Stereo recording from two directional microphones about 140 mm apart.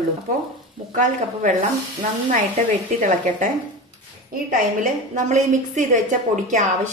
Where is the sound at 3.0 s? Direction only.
70° right (ahead or behind).